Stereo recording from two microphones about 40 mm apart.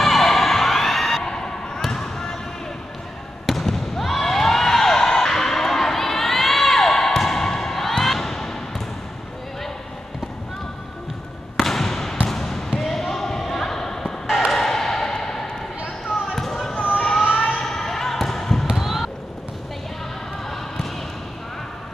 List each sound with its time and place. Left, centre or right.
0.0 s music: centre
1.9 s basketball bounce: centre
3.4 s a sound: centre
7.9 s basketball bounce: centre
11.6 s basketball bounce: centre
14.2 s a sound: centre
16.3 s basketball bounce: centre
16.9 s a sound: centre
17.3 s vehicle: left
17.6 s basketball bounce: centre
18.7 s basketball bounce: centre